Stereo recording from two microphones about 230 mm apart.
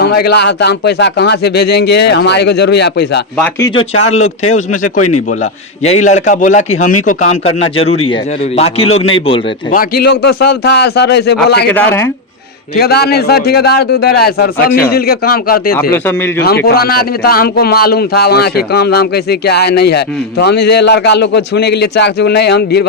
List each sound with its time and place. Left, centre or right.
0.0 s a man's voice: left
3.3 s speech: centre
4.5 s a man's voice: left
4.9 s a man's voice: left
5.4 s a man's voice: left
9.7 s a man's voice: left
11.7 s speech: centre
12.7 s a man's voice: left
15.9 s speech: centre
16.6 s a man's voice: left